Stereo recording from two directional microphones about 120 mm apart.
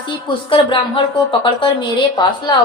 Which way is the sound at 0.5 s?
45° left (ahead or behind).